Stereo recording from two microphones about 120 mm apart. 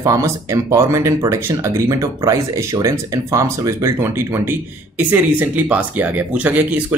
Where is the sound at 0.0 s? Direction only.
25° right (ahead or behind).